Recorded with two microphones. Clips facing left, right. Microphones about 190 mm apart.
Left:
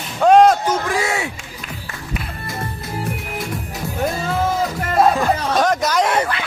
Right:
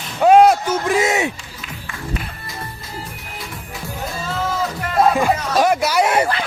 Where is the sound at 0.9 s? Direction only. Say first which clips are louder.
Right 4 dB; 20° right (ahead or behind).